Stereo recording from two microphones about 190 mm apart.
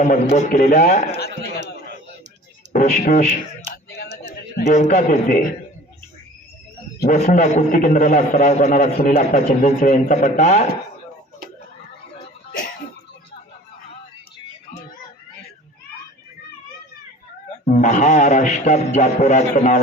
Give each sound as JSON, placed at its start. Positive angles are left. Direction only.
{"t": 0.0, "sound": "speech", "side_deg": 40}
{"t": 2.7, "sound": "speech", "side_deg": 40}
{"t": 3.8, "sound": "a sound", "side_deg": 55}
{"t": 4.7, "sound": "speech", "side_deg": 40}
{"t": 7.1, "sound": "speech", "side_deg": 40}
{"t": 17.7, "sound": "speech", "side_deg": 40}